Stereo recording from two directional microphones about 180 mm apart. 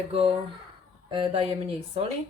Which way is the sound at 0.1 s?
35° right (ahead or behind).